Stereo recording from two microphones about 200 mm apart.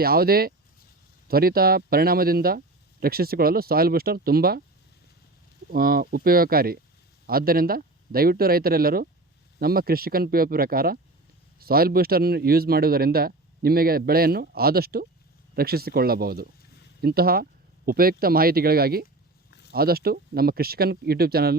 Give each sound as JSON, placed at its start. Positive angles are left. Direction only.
{"t": 0.0, "sound": "a man's voice", "side_deg": -50}
{"t": 5.7, "sound": "a man's voice", "side_deg": -45}